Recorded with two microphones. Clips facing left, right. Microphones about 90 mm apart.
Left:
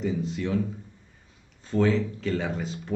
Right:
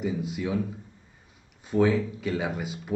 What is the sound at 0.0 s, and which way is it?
Speech, 10° right (ahead or behind).